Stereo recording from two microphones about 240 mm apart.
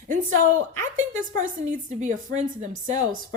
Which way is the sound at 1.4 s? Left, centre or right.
Right.